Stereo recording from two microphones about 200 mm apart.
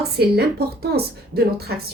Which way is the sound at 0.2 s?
55° right (ahead or behind).